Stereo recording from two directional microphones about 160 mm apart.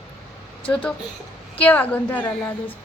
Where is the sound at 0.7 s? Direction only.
10° left (ahead or behind).